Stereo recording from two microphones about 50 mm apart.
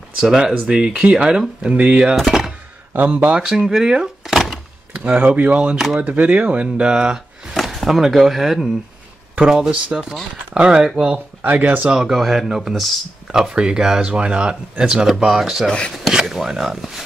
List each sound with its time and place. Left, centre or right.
0.2 s speech: centre
2.2 s a sound: centre
2.9 s speech: right
3.3 s speech: centre
4.9 s speech: right
7.5 s speech: centre
9.3 s speech: centre
11.5 s speech: right
11.9 s speech: centre
15.6 s speech: centre
16.3 s speech: centre